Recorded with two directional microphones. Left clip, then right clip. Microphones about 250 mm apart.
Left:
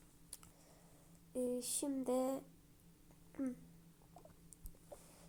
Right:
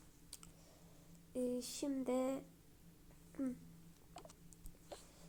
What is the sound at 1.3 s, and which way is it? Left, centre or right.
Speech, centre.